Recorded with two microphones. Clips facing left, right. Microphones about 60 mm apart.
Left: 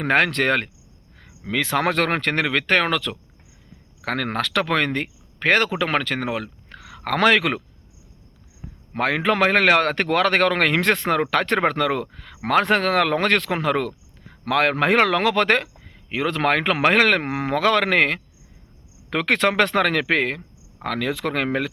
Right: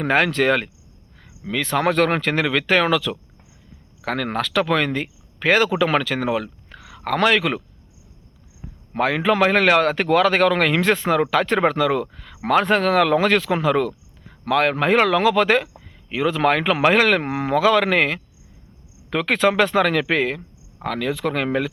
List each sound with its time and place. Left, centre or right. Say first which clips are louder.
0.0 s speech: right 1 dB; left
1.5 s speech: right 1 dB; left
6.7 s speech: right 1 dB; left
9.0 s a man's voice: right 2 dB; left
14.4 s a man's voice: right 1 dB; left
20.8 s speech: right 1 dB; left